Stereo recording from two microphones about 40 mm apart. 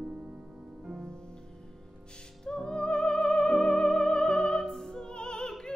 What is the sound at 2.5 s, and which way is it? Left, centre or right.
Music, left.